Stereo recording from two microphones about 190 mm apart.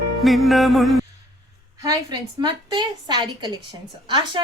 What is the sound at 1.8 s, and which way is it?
A woman's voice, 25° right (ahead or behind).